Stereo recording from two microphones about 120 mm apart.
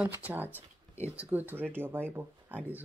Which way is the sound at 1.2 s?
15° right (ahead or behind).